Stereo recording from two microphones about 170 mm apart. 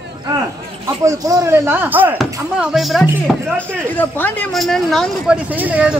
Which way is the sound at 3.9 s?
10° left (ahead or behind).